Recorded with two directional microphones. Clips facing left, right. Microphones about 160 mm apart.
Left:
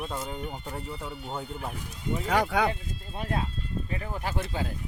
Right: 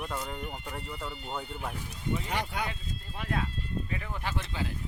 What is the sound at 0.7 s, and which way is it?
Speech, 25° left (ahead or behind).